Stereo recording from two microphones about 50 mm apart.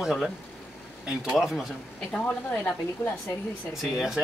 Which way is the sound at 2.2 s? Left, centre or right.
Left.